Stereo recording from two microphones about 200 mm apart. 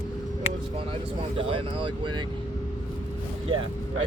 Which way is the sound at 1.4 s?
25° right (ahead or behind).